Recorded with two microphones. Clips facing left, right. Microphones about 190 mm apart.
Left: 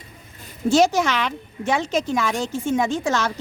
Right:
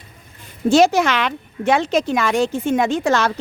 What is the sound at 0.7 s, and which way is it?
Speech, 65° right (ahead or behind).